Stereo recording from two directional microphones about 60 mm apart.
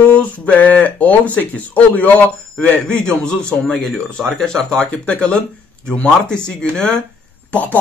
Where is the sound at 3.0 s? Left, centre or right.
Centre.